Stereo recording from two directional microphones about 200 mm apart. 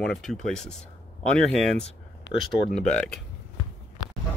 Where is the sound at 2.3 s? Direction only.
60° left (ahead or behind).